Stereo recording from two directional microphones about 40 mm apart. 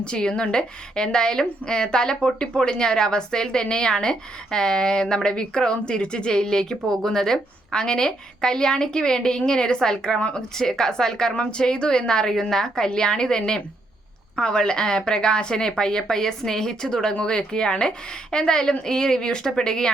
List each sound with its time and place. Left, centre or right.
0.0 s a woman's voice: left